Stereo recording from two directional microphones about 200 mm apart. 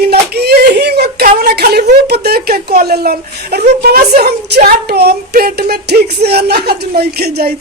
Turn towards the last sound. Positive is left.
turn(degrees=-50)  # may be behind; listen again after turning